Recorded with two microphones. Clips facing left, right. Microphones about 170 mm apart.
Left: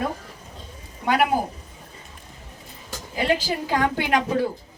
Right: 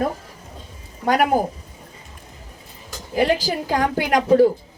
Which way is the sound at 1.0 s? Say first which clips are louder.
Right 2 dB; 40° right (ahead or behind).